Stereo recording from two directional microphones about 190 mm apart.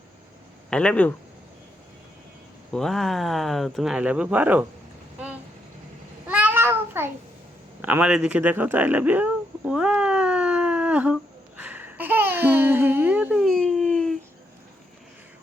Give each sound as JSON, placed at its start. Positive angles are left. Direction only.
{"t": 0.7, "sound": "speech", "side_deg": 5}
{"t": 2.7, "sound": "speech", "side_deg": 0}
{"t": 6.2, "sound": "a sound", "side_deg": -10}